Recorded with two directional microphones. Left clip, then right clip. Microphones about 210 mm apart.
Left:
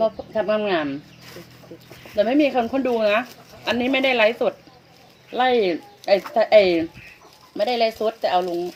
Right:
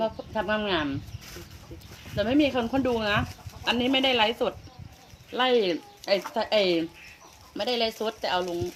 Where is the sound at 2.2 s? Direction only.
20° right (ahead or behind).